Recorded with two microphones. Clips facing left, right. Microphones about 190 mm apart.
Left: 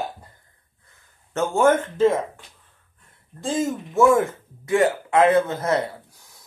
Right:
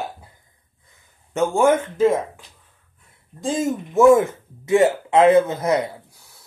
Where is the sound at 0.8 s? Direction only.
10° right (ahead or behind).